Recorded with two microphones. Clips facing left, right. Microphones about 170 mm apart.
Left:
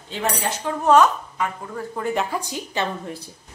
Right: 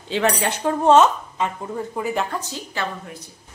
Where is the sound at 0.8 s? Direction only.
25° right (ahead or behind).